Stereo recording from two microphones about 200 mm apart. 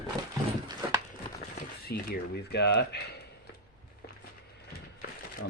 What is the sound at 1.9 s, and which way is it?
Speech, 55° left (ahead or behind).